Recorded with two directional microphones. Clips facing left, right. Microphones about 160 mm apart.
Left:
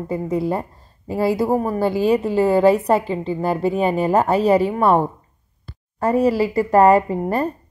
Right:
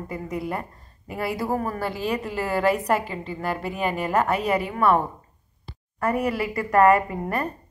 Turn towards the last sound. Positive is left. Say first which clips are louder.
# left 7 dB
turn(degrees=30)  # may be behind; listen again after turning